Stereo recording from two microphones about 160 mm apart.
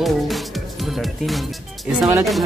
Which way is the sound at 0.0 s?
Centre (ahead or behind).